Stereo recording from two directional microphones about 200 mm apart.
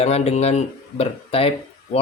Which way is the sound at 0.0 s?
30° left (ahead or behind).